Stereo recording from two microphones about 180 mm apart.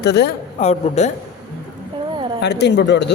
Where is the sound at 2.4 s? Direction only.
70° left (ahead or behind).